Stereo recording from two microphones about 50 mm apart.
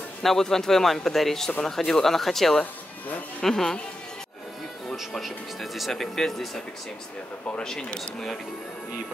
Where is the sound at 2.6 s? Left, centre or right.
Left.